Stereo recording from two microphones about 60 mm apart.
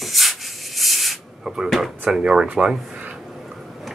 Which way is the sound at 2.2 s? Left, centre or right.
Centre.